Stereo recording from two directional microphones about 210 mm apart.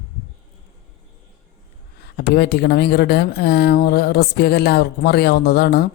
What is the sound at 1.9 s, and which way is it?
Speech, 50° left (ahead or behind).